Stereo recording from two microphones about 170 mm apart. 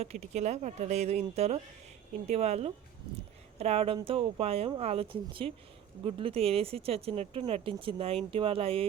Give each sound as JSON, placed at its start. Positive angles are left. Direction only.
{"t": 0.0, "sound": "speech", "side_deg": -40}